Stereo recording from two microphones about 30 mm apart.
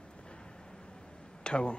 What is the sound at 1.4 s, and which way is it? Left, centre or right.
Speech, left.